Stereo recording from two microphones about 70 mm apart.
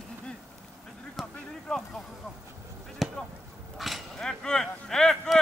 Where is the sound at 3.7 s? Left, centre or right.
Centre.